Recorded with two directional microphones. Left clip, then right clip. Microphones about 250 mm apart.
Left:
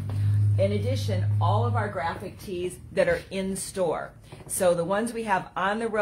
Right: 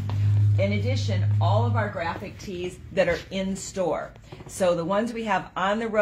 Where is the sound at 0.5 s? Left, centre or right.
Centre.